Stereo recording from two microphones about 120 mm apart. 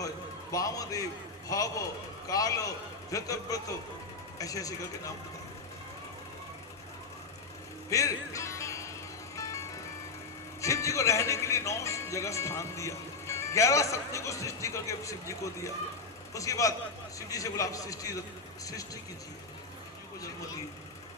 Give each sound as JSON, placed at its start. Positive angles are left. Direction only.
{"t": 0.5, "sound": "speech", "side_deg": 30}
{"t": 7.9, "sound": "music", "side_deg": 25}
{"t": 10.6, "sound": "speech", "side_deg": 25}